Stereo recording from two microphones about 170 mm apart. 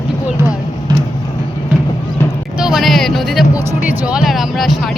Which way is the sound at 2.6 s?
Centre (ahead or behind).